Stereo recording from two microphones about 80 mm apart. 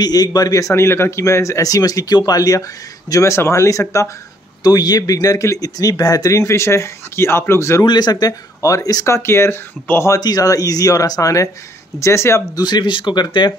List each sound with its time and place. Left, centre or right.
0.0 s speech: left
3.1 s speech: left
4.6 s speech: left
7.8 s speech: left
10.0 s speech: left
12.5 s speech: left